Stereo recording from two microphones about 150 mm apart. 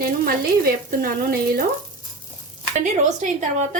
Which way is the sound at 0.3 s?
75° right (ahead or behind).